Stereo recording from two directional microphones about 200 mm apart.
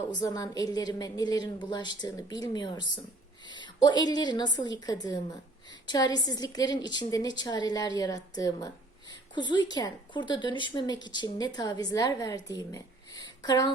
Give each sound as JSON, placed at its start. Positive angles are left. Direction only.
{"t": 0.1, "sound": "a woman's voice", "side_deg": 20}